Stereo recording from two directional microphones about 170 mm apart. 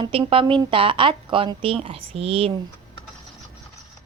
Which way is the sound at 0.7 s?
30° right (ahead or behind).